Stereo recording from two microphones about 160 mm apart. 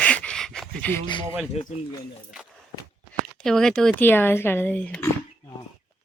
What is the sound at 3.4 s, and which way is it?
Speech, 5° left (ahead or behind).